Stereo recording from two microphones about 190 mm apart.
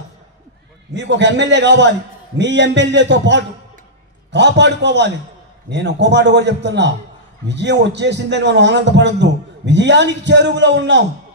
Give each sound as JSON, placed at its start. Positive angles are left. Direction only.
{"t": 0.9, "sound": "a man's voice", "side_deg": -65}